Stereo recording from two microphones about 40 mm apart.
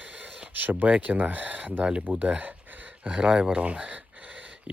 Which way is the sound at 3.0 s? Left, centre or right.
Right.